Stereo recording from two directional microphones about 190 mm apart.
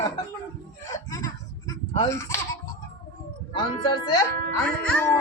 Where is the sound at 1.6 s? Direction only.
25° left (ahead or behind).